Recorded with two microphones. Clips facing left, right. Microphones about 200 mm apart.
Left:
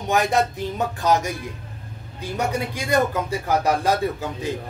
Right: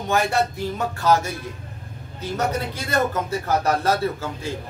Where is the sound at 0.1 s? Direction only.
20° left (ahead or behind).